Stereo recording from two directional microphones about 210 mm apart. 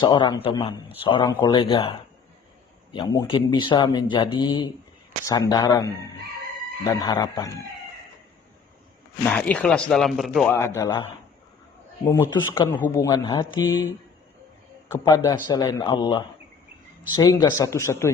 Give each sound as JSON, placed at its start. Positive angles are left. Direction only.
{"t": 0.0, "sound": "speech", "side_deg": 20}
{"t": 6.8, "sound": "speech", "side_deg": 15}
{"t": 9.2, "sound": "speech", "side_deg": 5}
{"t": 12.0, "sound": "speech", "side_deg": 15}
{"t": 14.8, "sound": "speech", "side_deg": 15}